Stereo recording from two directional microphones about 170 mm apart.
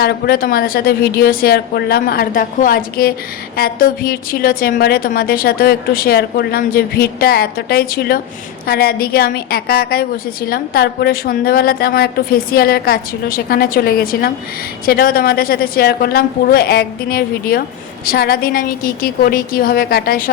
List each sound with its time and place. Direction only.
0.0 s a woman's voice: 65° left (ahead or behind)